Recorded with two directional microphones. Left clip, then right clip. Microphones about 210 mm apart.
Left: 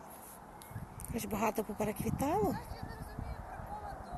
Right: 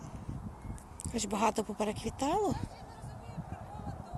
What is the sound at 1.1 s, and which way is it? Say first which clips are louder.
Speech: right 4 dB; 10° right (ahead or behind).